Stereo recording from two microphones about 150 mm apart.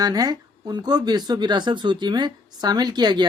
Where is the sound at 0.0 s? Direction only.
25° right (ahead or behind).